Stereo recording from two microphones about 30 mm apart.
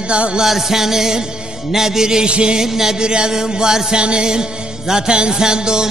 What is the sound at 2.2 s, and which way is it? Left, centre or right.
Music, right.